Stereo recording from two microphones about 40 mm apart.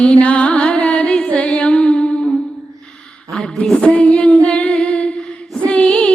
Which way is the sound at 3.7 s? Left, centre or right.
Left.